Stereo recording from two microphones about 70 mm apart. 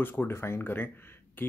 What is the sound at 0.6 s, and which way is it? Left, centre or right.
Speech, left.